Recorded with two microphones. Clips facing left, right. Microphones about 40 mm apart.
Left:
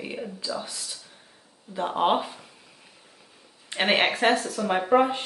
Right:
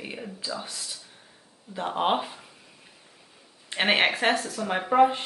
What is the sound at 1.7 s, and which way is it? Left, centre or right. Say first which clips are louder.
Speech: left 2 dB; centre.